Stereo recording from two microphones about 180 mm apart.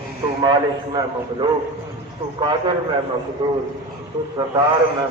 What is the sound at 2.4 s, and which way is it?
A man's voice, 25° right (ahead or behind).